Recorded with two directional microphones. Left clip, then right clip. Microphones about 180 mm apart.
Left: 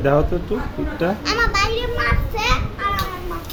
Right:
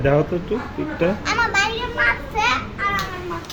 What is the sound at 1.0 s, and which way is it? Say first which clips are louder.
Children playing: even; 20° left (ahead or behind).